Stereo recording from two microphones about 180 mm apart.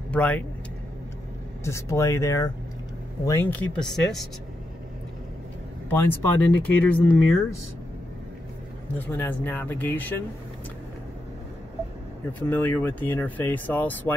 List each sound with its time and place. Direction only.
0.1 s speech: 10° left (ahead or behind)
1.6 s speech: 15° left (ahead or behind)
5.9 s speech: 10° left (ahead or behind)
8.9 s speech: 10° left (ahead or behind)
12.4 s speech: 10° left (ahead or behind)